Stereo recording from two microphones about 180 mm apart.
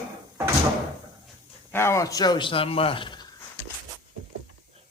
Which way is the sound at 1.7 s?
15° left (ahead or behind).